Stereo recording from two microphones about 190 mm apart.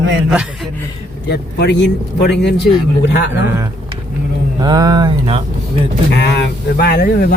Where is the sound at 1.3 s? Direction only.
60° left (ahead or behind).